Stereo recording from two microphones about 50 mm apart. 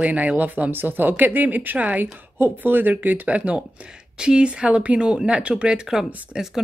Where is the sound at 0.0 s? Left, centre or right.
Right.